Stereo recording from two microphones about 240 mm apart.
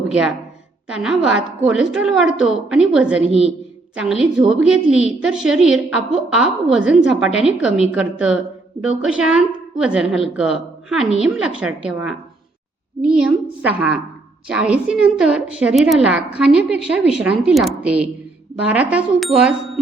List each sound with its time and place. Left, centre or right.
0.1 s a woman's voice: centre
13.0 s a woman's voice: centre